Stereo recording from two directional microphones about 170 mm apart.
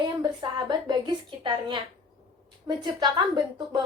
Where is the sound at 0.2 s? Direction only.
30° right (ahead or behind).